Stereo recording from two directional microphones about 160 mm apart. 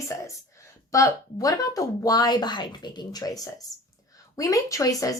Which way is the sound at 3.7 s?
20° left (ahead or behind).